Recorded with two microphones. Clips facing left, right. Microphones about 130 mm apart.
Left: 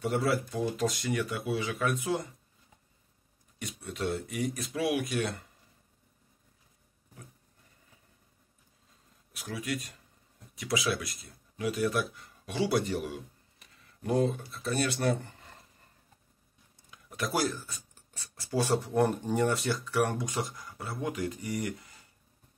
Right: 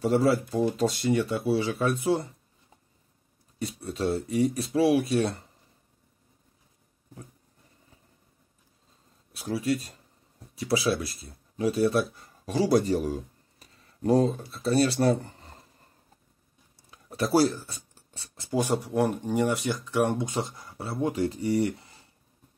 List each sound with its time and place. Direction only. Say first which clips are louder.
0.0 s speech: right 6 dB; 30° right (ahead or behind)
3.5 s speech: right 6 dB; 30° right (ahead or behind)
9.3 s speech: right 8 dB; 30° right (ahead or behind)
16.7 s speech: right 5 dB; 35° right (ahead or behind)